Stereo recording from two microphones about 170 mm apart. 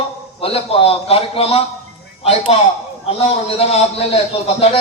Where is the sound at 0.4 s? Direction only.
35° left (ahead or behind).